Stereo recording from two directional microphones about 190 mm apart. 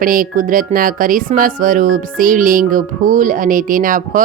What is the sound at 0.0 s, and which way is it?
Speech, 45° right (ahead or behind).